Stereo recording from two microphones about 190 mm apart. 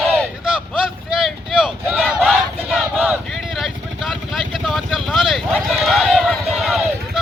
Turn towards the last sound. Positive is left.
turn(degrees=0)  # may be behind; listen again after turning